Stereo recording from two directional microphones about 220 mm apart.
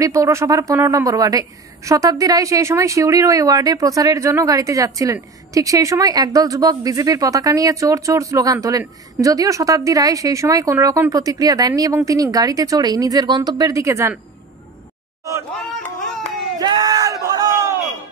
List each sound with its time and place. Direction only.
0.0 s speech: 15° right (ahead or behind)
16.5 s crowd: 15° right (ahead or behind)